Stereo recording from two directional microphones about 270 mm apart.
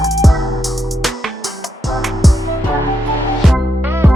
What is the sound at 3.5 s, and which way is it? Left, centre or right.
Music, centre.